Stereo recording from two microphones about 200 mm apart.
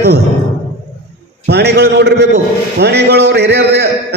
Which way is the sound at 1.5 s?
55° right (ahead or behind).